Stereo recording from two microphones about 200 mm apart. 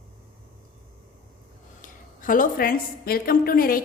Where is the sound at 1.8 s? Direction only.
45° left (ahead or behind).